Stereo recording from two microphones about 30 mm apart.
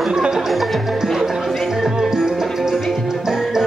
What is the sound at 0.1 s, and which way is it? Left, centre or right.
Music, centre.